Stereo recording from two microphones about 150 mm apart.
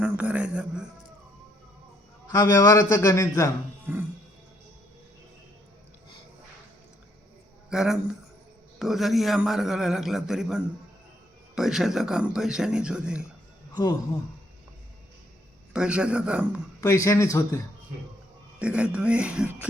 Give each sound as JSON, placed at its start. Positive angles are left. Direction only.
{"t": 0.0, "sound": "a man's voice", "side_deg": -10}
{"t": 2.3, "sound": "a man's voice", "side_deg": 25}
{"t": 3.9, "sound": "speech", "side_deg": -15}
{"t": 7.7, "sound": "a man's voice", "side_deg": -5}
{"t": 15.7, "sound": "speech", "side_deg": -5}
{"t": 16.8, "sound": "a man's voice", "side_deg": 20}
{"t": 18.6, "sound": "speech", "side_deg": -10}